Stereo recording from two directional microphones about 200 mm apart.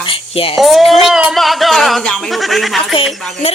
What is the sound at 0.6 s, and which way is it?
Speech, centre (ahead or behind).